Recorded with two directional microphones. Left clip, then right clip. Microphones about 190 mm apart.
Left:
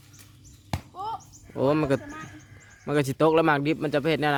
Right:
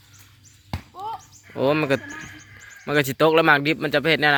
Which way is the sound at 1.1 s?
20° left (ahead or behind).